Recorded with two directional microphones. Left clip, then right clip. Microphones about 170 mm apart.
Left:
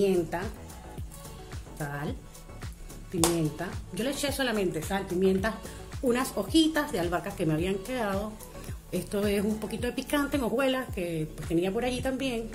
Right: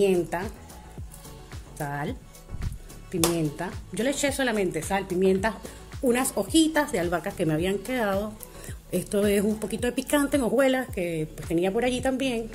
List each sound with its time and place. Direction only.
0.0 s a woman's voice: 40° right (ahead or behind)
1.8 s a woman's voice: 35° right (ahead or behind)
3.3 s a woman's voice: 40° right (ahead or behind)